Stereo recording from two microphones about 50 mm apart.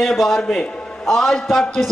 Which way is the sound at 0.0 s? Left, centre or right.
Centre.